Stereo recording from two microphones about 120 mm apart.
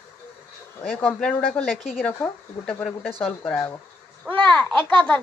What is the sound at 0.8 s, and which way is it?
Speech, 5° left (ahead or behind).